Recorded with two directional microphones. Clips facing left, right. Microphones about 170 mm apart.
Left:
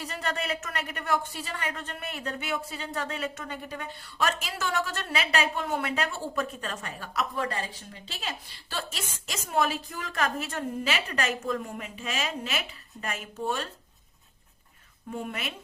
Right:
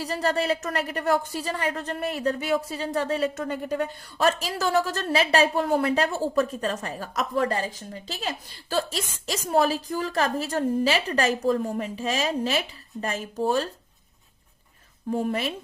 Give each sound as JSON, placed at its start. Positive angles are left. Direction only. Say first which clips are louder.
{"t": 0.0, "sound": "a woman's voice", "louder": "right 8 dB", "side_deg": -35}
{"t": 15.1, "sound": "a woman's voice", "louder": "right 9 dB", "side_deg": -35}